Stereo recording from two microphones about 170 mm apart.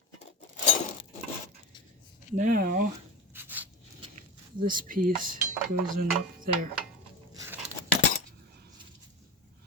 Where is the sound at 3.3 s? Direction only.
10° right (ahead or behind).